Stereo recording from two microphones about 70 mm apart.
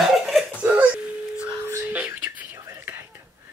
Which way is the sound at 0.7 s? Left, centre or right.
Centre.